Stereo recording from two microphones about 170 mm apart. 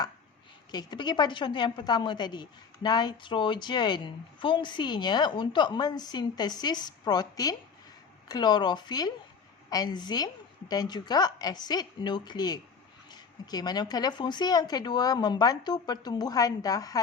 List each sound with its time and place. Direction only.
0.7 s a woman's voice: 25° left (ahead or behind)